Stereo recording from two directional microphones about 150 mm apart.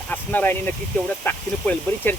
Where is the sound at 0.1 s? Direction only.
10° left (ahead or behind).